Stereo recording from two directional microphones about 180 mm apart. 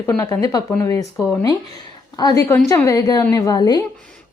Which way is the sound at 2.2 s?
20° left (ahead or behind).